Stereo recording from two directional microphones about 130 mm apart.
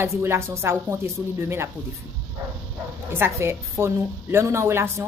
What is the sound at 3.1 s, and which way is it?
Speech, 20° right (ahead or behind).